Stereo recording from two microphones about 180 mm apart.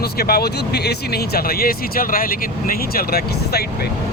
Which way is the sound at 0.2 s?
60° left (ahead or behind).